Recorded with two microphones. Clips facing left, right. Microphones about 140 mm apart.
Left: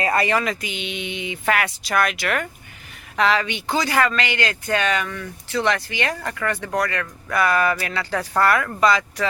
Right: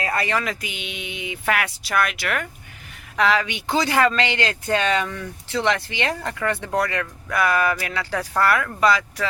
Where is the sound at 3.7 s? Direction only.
20° right (ahead or behind).